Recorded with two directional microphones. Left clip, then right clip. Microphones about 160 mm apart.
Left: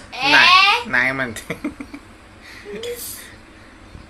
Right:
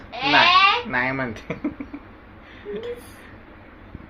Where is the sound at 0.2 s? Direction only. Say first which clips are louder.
Left 4 dB; 30° left (ahead or behind).